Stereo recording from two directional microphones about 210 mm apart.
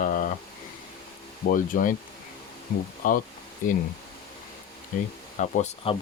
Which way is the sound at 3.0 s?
40° left (ahead or behind).